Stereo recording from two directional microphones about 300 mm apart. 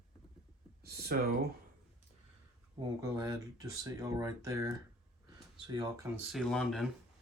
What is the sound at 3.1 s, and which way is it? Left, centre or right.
Speech, centre.